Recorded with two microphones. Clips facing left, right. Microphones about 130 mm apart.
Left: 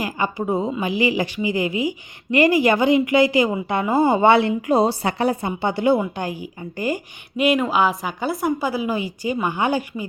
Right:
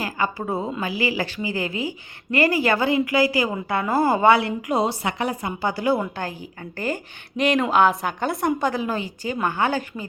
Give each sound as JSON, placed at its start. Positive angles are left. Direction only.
{"t": 0.0, "sound": "a woman's voice", "side_deg": 15}